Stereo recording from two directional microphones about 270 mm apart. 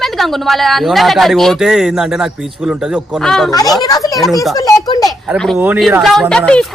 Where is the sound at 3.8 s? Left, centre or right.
Centre.